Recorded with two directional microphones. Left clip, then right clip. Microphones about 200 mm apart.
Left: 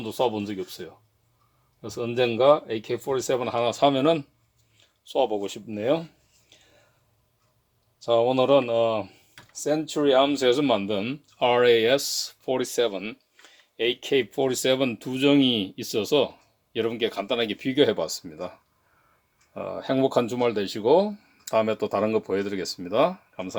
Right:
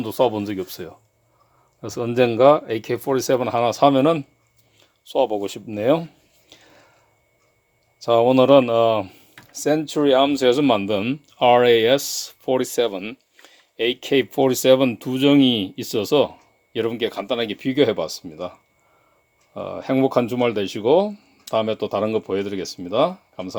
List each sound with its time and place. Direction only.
0.0 s speech: 35° right (ahead or behind)
6.5 s a sound: 35° right (ahead or behind)
8.0 s speech: 35° right (ahead or behind); by 18.5 s 15° right (ahead or behind)
19.5 s speech: 20° right (ahead or behind)